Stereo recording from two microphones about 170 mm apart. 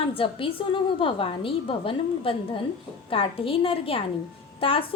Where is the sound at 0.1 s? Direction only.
30° left (ahead or behind).